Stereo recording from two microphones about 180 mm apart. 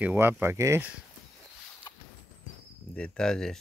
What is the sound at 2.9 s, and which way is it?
Speech, 5° left (ahead or behind).